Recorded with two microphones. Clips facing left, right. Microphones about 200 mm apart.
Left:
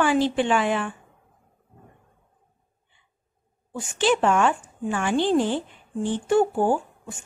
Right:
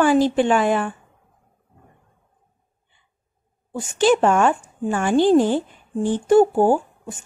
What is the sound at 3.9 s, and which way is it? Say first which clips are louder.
Speech: right 4 dB; 40° right (ahead or behind).